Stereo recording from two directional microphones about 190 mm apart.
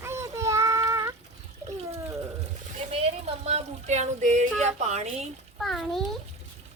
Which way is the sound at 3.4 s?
35° right (ahead or behind).